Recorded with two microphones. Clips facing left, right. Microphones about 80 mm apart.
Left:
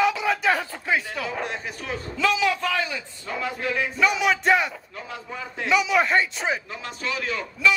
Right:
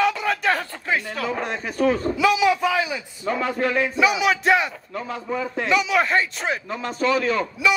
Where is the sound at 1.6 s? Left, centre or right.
Right.